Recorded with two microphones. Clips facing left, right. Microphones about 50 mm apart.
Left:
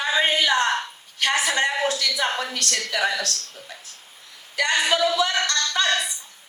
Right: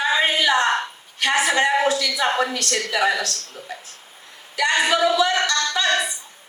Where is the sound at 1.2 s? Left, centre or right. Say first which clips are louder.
Right 3 dB; right.